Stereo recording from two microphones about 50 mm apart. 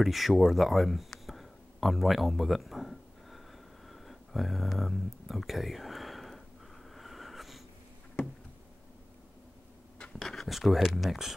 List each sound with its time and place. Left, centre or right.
0.0 s a sound: centre
7.0 s wheeze: centre
10.1 s speech: centre